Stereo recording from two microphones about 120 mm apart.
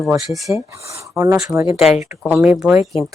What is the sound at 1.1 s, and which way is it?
Speech, 20° right (ahead or behind).